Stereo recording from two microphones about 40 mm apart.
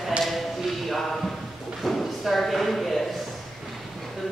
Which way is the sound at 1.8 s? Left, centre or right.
Centre.